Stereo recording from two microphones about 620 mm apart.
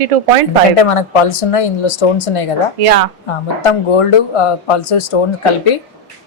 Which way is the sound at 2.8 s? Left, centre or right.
Right.